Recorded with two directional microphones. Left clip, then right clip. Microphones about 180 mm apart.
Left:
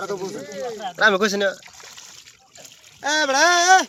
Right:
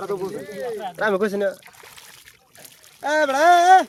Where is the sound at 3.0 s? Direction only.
25° right (ahead or behind).